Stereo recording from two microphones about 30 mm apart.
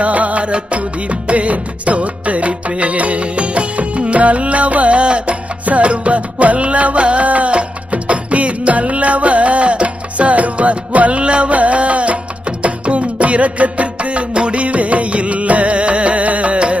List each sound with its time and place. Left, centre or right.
0.0 s music: right
0.4 s music: right
5.0 s music: right
5.6 s music: right
7.3 s music: right
7.5 s music: right
11.2 s music: right